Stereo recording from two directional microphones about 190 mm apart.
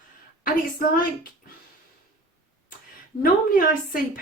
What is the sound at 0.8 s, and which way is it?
Speech, 50° left (ahead or behind).